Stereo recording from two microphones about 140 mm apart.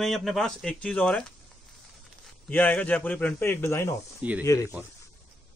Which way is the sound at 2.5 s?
10° left (ahead or behind).